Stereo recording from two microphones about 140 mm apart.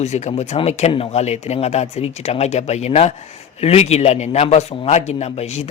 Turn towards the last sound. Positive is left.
turn(degrees=50)  # may be behind; listen again after turning